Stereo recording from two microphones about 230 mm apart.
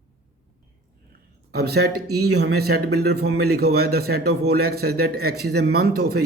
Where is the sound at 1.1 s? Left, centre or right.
Right.